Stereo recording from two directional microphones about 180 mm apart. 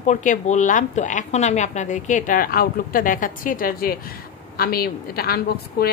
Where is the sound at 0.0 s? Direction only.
45° left (ahead or behind).